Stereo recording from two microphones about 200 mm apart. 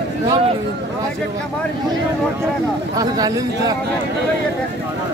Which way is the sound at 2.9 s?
20° right (ahead or behind).